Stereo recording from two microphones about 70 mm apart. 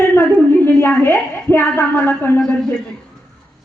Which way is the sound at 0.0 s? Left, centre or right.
Left.